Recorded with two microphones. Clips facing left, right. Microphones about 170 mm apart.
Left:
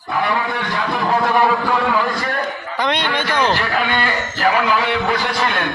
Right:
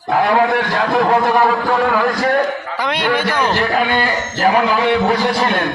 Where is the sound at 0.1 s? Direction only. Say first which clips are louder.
Right 7 dB; 70° right (ahead or behind).